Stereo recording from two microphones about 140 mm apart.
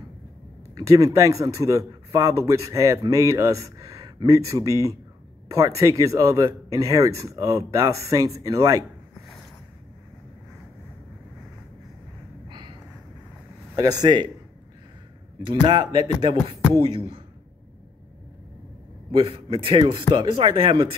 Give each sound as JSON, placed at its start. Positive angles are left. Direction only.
{"t": 0.7, "sound": "a man's voice", "side_deg": -25}
{"t": 12.4, "sound": "a sound", "side_deg": -35}
{"t": 13.7, "sound": "a man's voice", "side_deg": -30}
{"t": 15.4, "sound": "speech", "side_deg": -35}
{"t": 19.1, "sound": "speech", "side_deg": -40}